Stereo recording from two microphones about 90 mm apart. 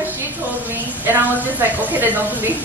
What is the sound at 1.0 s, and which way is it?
A woman's voice, 20° right (ahead or behind).